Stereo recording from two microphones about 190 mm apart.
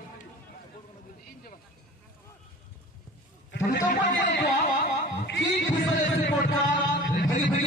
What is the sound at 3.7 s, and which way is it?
Speech, 40° left (ahead or behind).